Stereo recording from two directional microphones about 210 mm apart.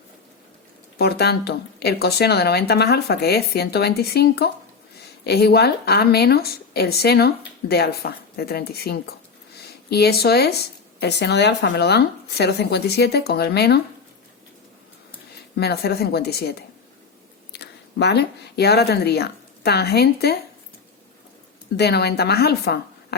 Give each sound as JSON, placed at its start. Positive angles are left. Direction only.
{"t": 0.9, "sound": "a woman's voice", "side_deg": 50}
{"t": 15.5, "sound": "a woman's voice", "side_deg": 50}
{"t": 21.8, "sound": "a woman's voice", "side_deg": 50}